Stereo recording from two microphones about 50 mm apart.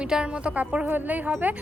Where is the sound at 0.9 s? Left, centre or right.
Right.